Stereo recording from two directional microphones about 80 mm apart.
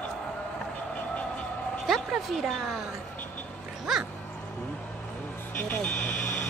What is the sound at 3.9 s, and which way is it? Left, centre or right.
Music, centre.